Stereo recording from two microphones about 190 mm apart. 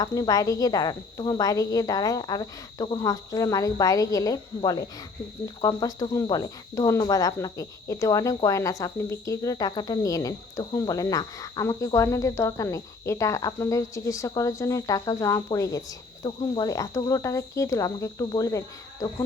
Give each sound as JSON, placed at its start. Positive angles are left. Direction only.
{"t": 0.0, "sound": "speech", "side_deg": 20}
{"t": 5.6, "sound": "cricket", "side_deg": 20}